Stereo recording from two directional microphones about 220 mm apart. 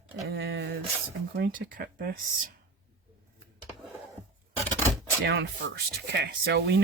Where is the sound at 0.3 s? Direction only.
50° right (ahead or behind).